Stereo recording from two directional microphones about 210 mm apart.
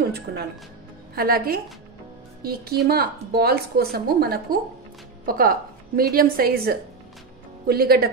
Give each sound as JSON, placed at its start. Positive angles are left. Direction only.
{"t": 0.1, "sound": "a woman's voice", "side_deg": -50}